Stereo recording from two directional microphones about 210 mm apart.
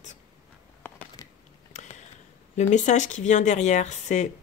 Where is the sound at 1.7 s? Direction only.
35° left (ahead or behind).